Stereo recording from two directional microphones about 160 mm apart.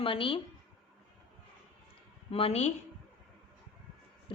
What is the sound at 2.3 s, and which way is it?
Speech, 40° left (ahead or behind).